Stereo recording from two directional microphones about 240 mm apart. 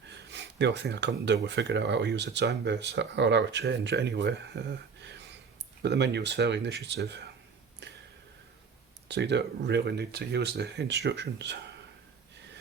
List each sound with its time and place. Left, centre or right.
0.1 s speech: right
9.0 s speech: right